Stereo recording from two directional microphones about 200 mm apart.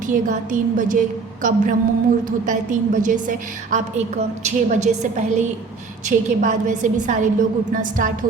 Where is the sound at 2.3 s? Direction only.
40° right (ahead or behind).